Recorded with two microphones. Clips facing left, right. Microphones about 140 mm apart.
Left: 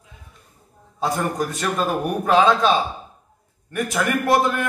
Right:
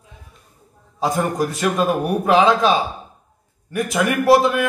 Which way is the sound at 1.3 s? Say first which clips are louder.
Right 4 dB; 10° right (ahead or behind).